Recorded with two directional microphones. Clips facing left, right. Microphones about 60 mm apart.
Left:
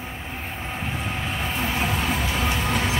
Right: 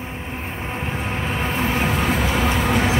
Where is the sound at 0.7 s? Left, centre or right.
Right.